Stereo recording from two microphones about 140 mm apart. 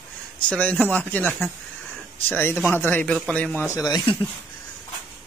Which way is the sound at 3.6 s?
25° left (ahead or behind).